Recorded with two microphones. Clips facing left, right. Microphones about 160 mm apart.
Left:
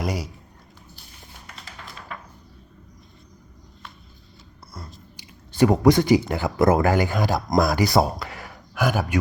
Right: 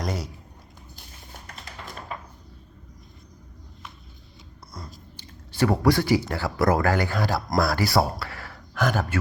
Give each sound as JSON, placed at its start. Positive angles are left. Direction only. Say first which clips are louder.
{"t": 0.0, "sound": "speech", "louder": "left 3 dB", "side_deg": 10}
{"t": 4.7, "sound": "chewing", "louder": "even", "side_deg": 5}
{"t": 5.2, "sound": "speech", "louder": "left 5 dB", "side_deg": 20}